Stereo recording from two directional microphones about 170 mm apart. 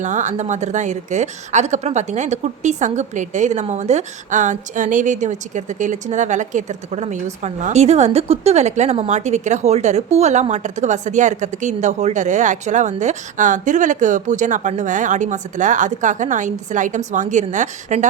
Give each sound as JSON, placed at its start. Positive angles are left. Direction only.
{"t": 0.0, "sound": "a woman's voice", "side_deg": -45}